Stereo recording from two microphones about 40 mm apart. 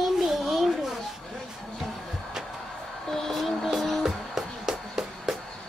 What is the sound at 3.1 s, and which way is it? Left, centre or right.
Music, centre.